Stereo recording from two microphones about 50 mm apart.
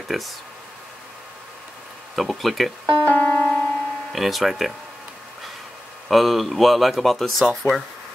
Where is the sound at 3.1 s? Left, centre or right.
Left.